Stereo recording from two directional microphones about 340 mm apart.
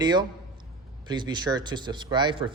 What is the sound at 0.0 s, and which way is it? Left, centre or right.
A man's voice, centre.